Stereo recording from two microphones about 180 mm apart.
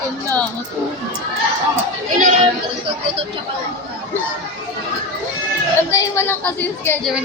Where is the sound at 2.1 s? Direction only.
45° right (ahead or behind).